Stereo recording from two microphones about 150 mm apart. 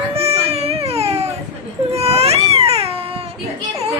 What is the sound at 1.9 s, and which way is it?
Cat, 45° right (ahead or behind).